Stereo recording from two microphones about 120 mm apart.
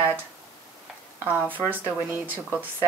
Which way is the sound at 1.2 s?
15° right (ahead or behind).